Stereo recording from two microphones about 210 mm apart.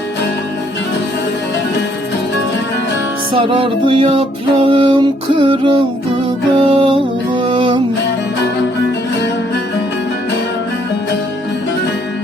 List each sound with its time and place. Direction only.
3.3 s music: 25° right (ahead or behind)